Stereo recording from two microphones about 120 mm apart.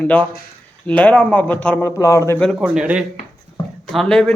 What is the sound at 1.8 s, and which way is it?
Speech, 25° left (ahead or behind).